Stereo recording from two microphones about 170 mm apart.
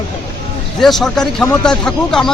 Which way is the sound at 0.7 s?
Centre (ahead or behind).